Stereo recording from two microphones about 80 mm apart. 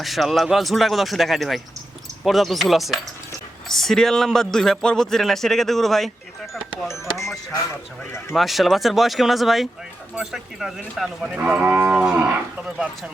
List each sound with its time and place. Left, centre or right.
0.0 s a man's voice: centre
8.3 s a man's voice: centre
11.3 s cattle: centre